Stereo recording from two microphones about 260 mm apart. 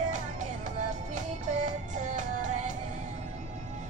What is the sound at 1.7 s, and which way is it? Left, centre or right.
Music, right.